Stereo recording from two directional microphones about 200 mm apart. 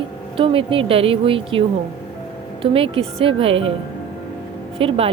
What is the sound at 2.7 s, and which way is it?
Speech, 25° right (ahead or behind).